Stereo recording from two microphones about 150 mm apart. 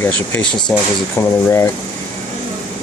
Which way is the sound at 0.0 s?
15° left (ahead or behind).